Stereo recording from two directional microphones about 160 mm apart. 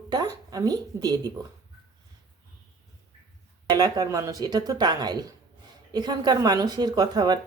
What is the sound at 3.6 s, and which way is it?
Speech, 25° right (ahead or behind).